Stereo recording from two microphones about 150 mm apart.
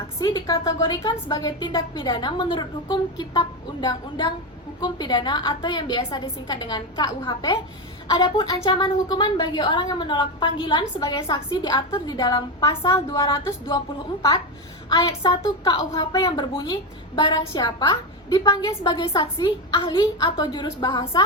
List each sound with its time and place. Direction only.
0.2 s a woman's voice: 25° left (ahead or behind)
14.8 s a woman's voice: 30° left (ahead or behind)